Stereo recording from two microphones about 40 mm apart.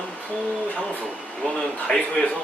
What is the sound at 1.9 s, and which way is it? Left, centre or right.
Speech, left.